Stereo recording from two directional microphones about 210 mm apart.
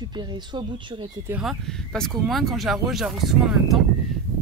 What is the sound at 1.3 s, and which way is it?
Speech, 5° right (ahead or behind).